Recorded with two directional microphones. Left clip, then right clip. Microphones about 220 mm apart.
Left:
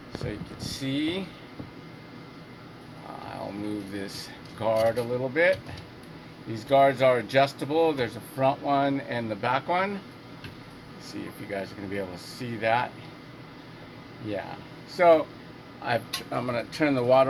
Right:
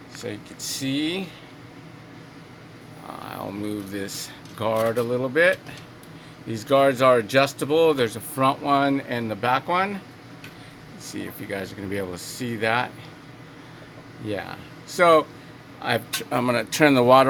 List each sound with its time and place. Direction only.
0.8 s speech: 25° right (ahead or behind)
3.9 s speech: 30° right (ahead or behind)
11.0 s speech: 30° right (ahead or behind)
14.8 s speech: 35° right (ahead or behind)